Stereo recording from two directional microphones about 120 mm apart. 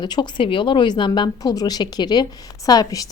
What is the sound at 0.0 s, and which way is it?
A woman's voice, 40° left (ahead or behind).